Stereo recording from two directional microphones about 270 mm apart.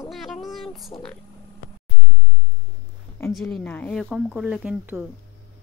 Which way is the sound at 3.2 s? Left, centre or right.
Centre.